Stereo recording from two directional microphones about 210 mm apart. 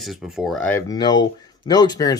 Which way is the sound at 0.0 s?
Centre (ahead or behind).